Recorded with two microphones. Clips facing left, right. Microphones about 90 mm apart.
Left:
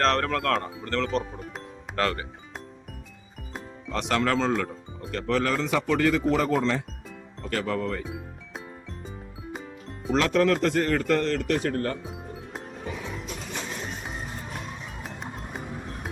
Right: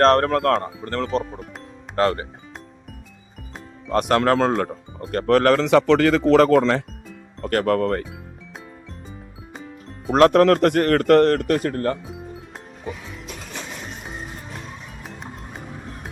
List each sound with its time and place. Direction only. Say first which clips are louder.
0.0 s speech: right 8 dB; 40° right (ahead or behind)
1.2 s speech: right 3 dB; centre (ahead or behind)
2.0 s speech: right 7 dB; 35° right (ahead or behind)
3.8 s speech: right 7 dB; 50° right (ahead or behind); by 6.8 s 75° right (ahead or behind)
7.4 s speech: right 8 dB; 60° right (ahead or behind)
8.9 s music: even; centre (ahead or behind)
10.1 s speech: right 8 dB; 55° right (ahead or behind)
12.0 s music: right 2 dB; centre (ahead or behind)
15.0 s music: right 1 dB; centre (ahead or behind)